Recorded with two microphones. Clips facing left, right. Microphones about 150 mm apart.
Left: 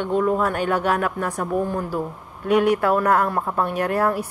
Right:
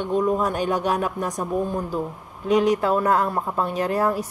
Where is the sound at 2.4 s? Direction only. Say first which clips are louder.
Left 1 dB; 60° left (ahead or behind).